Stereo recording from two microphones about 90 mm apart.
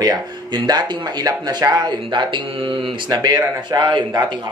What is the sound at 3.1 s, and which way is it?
Speech, 45° right (ahead or behind).